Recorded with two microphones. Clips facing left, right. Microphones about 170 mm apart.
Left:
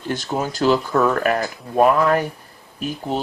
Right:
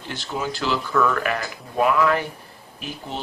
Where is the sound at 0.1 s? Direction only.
45° left (ahead or behind).